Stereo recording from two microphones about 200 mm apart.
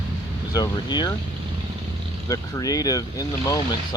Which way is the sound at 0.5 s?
20° left (ahead or behind).